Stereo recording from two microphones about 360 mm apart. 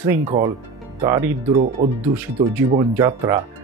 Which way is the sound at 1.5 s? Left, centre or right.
Right.